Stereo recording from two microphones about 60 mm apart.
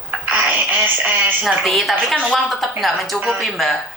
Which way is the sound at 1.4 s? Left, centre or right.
Centre.